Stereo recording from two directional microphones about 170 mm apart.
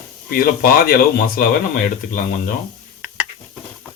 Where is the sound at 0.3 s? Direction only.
60° left (ahead or behind).